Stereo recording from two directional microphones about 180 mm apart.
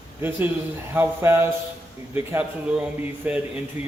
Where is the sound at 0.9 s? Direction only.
10° right (ahead or behind).